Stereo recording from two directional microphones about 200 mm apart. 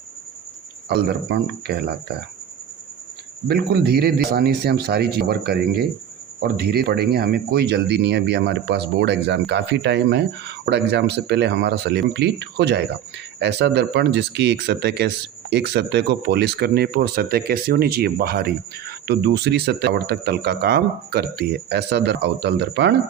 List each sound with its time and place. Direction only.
0.9 s speech: 55° right (ahead or behind)
3.5 s speech: 55° right (ahead or behind)